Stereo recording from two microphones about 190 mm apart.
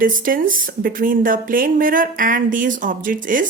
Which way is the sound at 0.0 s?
45° right (ahead or behind).